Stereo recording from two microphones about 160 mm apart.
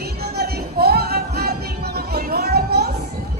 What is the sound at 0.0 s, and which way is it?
Music, 80° right.